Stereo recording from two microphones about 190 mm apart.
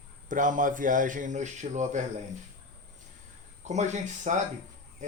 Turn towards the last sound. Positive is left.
turn(degrees=-40)  # may be behind; listen again after turning